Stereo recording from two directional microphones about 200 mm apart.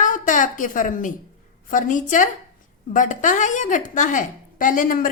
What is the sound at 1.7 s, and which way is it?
A woman's voice, 40° left (ahead or behind).